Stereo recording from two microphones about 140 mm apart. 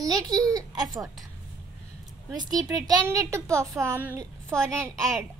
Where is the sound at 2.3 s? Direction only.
25° right (ahead or behind).